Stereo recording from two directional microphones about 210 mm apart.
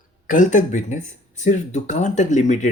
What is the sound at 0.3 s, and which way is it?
Speech, 35° left (ahead or behind).